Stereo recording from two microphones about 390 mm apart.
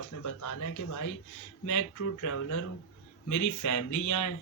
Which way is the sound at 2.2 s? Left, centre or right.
Left.